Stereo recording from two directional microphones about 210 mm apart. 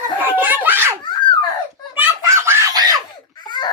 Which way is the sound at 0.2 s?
10° right (ahead or behind).